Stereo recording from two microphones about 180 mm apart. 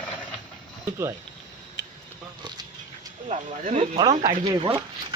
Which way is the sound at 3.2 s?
40° right (ahead or behind).